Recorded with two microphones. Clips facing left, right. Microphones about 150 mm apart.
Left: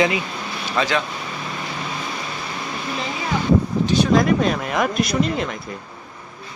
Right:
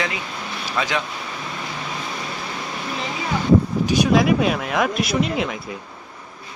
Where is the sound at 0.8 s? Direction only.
5° right (ahead or behind).